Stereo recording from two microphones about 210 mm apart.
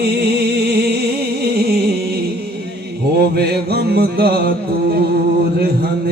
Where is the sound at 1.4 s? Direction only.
50° right (ahead or behind).